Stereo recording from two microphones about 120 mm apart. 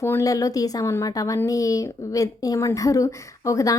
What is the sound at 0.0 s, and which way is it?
A woman's voice, 25° left (ahead or behind).